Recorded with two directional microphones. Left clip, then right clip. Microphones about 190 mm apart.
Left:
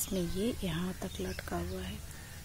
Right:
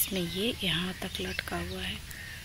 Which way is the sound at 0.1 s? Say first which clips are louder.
Right 2 dB; 10° left (ahead or behind).